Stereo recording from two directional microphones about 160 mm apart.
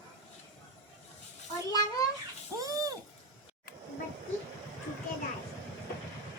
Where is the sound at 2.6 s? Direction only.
20° right (ahead or behind).